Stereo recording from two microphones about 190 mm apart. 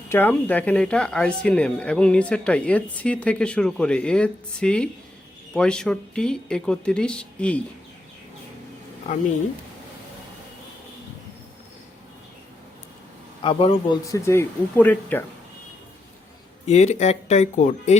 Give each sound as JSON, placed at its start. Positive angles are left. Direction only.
{"t": 0.1, "sound": "speech", "side_deg": 10}
{"t": 13.4, "sound": "a man's voice", "side_deg": 30}
{"t": 14.0, "sound": "speech", "side_deg": 15}
{"t": 16.6, "sound": "speech", "side_deg": 35}